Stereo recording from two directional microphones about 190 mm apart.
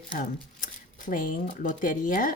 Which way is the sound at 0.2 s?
45° left (ahead or behind).